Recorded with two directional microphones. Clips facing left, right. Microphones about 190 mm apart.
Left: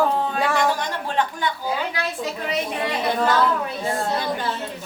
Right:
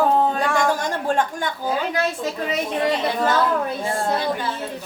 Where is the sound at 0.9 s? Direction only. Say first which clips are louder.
Right 3 dB; 45° right (ahead or behind).